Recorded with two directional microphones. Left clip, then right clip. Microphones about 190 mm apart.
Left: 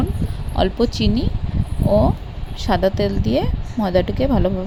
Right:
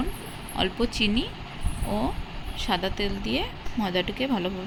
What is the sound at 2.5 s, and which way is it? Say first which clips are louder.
Speech: left 9 dB; 35° left (ahead or behind).